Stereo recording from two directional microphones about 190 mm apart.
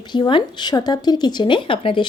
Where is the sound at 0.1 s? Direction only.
25° left (ahead or behind).